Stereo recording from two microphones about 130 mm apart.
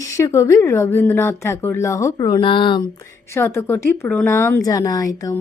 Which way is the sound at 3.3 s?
20° left (ahead or behind).